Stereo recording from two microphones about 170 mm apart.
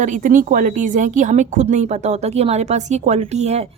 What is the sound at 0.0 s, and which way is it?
A woman's voice, 50° right (ahead or behind).